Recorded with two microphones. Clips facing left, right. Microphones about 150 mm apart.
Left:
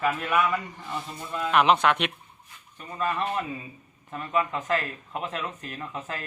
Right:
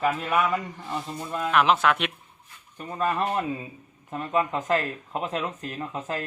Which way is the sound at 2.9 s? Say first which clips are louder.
Right 2 dB; 40° right (ahead or behind).